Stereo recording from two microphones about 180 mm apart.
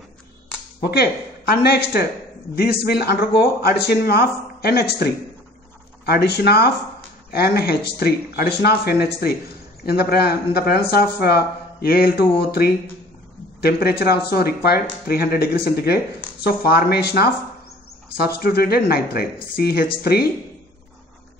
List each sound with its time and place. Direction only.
0.7 s speech: 60° left (ahead or behind)